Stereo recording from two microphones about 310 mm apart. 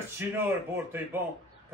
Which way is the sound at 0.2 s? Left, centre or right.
Centre.